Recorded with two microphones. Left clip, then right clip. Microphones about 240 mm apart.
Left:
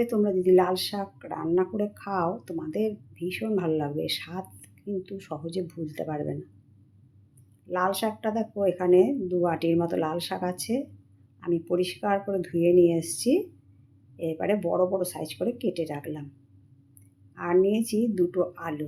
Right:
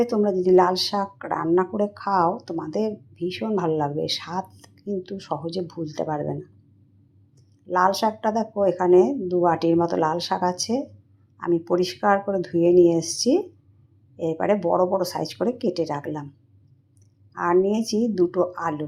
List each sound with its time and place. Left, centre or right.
0.0 s speech: centre
7.7 s speech: centre
17.3 s speech: centre